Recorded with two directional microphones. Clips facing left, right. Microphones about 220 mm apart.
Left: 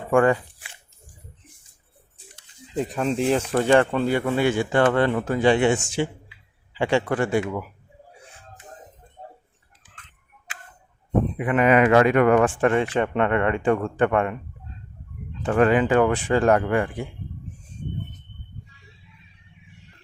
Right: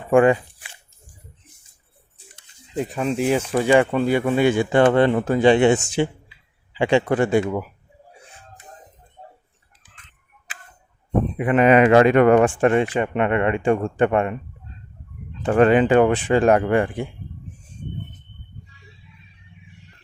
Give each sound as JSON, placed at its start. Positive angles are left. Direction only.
{"t": 0.1, "sound": "speech", "side_deg": -20}
{"t": 2.7, "sound": "speech", "side_deg": -5}
{"t": 11.3, "sound": "speech", "side_deg": -25}
{"t": 12.5, "sound": "speech", "side_deg": -15}
{"t": 15.4, "sound": "speech", "side_deg": -25}